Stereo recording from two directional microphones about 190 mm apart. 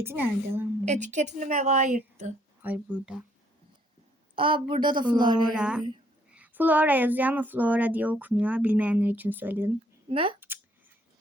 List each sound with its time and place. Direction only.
0.0 s speech: 10° right (ahead or behind)
0.9 s a woman's voice: 40° right (ahead or behind)
2.6 s speech: 10° right (ahead or behind)
4.4 s a woman's voice: 25° right (ahead or behind)
5.5 s a woman's voice: 5° right (ahead or behind)
10.1 s a woman's voice: 30° right (ahead or behind)